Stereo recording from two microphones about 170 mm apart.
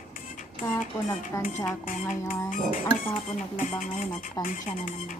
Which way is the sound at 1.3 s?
15° left (ahead or behind).